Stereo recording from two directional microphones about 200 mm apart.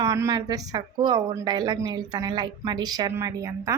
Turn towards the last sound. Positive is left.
turn(degrees=-15)  # may be behind; listen again after turning